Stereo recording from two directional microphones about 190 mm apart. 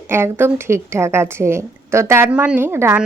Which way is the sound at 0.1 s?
10° right (ahead or behind).